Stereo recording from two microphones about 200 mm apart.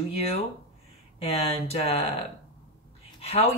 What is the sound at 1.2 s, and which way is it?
Speech, 30° left (ahead or behind).